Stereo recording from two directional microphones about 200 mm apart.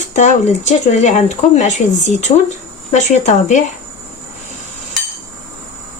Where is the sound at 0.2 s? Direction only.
35° left (ahead or behind).